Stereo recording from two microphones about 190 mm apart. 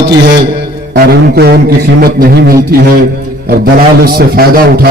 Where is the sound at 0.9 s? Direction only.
55° right (ahead or behind).